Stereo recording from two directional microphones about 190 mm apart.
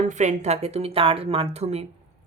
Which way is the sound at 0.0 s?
40° right (ahead or behind).